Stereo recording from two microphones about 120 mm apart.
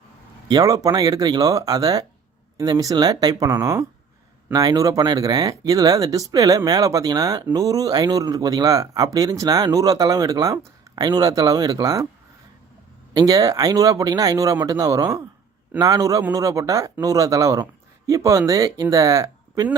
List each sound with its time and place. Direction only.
0.4 s speech: 30° right (ahead or behind)
13.1 s speech: 30° right (ahead or behind)